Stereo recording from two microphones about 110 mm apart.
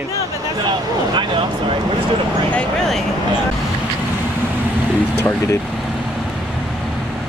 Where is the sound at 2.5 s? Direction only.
5° left (ahead or behind).